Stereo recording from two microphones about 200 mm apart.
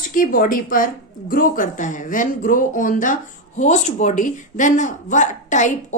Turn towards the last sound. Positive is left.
turn(degrees=35)  # may be behind; listen again after turning